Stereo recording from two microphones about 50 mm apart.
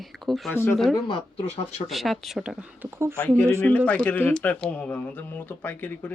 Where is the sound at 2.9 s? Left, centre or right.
Right.